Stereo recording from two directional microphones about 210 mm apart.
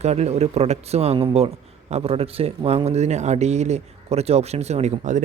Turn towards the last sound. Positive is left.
turn(degrees=-35)  # may be behind; listen again after turning